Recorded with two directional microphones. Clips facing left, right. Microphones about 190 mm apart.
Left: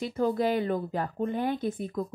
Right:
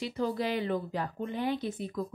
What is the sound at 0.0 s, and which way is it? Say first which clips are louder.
Speech: left 5 dB; 50° left (ahead or behind).